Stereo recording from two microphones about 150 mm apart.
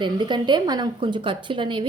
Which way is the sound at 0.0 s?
30° right (ahead or behind).